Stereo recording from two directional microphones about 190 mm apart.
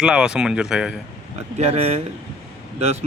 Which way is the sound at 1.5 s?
35° right (ahead or behind).